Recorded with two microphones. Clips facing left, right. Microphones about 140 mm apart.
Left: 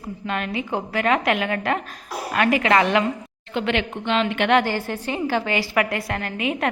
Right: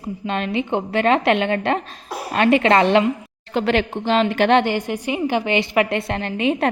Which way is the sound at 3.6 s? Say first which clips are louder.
Right 4 dB; 40° right (ahead or behind).